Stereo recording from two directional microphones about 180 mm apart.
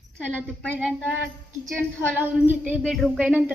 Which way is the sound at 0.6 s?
5° right (ahead or behind).